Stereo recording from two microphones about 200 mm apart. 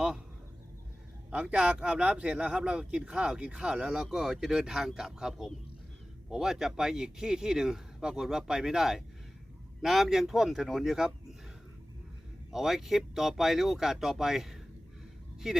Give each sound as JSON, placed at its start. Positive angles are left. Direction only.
{"t": 1.3, "sound": "speech", "side_deg": -5}
{"t": 12.5, "sound": "speech", "side_deg": 0}